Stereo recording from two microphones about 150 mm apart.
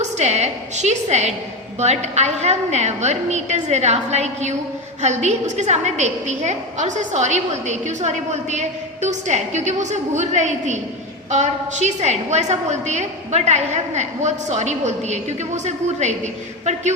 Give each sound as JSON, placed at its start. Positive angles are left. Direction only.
{"t": 0.0, "sound": "a woman's voice", "side_deg": -50}